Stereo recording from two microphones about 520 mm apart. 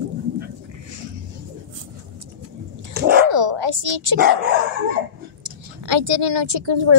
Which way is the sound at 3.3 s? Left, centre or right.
Right.